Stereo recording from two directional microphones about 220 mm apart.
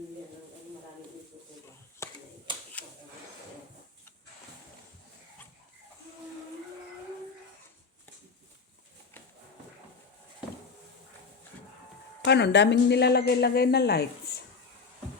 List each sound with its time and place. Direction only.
2.0 s finger snapping: 15° left (ahead or behind)
12.2 s a woman's voice: 50° left (ahead or behind)